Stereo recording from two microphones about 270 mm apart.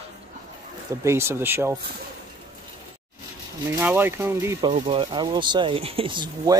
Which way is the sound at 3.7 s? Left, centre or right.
Centre.